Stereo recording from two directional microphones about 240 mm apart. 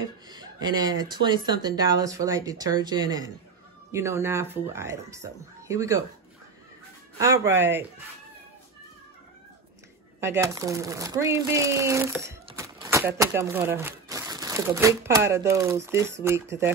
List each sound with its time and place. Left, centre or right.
0.3 s speech: centre
7.2 s speech: centre
10.2 s speech: centre